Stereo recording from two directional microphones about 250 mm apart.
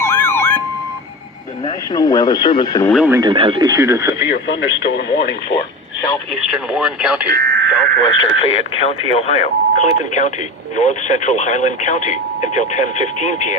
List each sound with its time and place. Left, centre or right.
0.0 s emergency vehicle: centre
1.6 s speech: centre
2.9 s speech: centre
3.2 s speech: centre
4.3 s speech: left
6.3 s speech: centre
7.3 s radio: right
8.0 s speech: left